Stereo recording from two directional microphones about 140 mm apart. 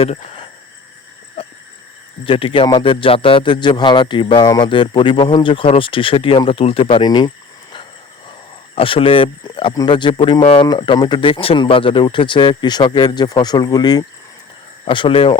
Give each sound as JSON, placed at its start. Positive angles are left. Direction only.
{"t": 0.0, "sound": "speech", "side_deg": 45}
{"t": 2.2, "sound": "speech", "side_deg": 40}
{"t": 8.7, "sound": "speech", "side_deg": 40}